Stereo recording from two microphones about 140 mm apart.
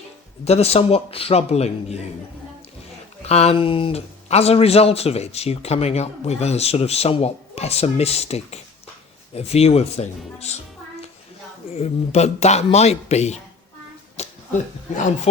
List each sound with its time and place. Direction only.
0.4 s speech: 45° left (ahead or behind)
3.2 s speech: 50° left (ahead or behind)
11.8 s speech: 50° left (ahead or behind)